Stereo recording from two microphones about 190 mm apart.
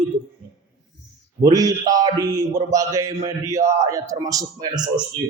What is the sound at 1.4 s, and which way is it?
A man's voice, 20° right (ahead or behind).